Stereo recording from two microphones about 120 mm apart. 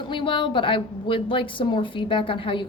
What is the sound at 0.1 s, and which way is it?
A woman's voice, 45° left (ahead or behind).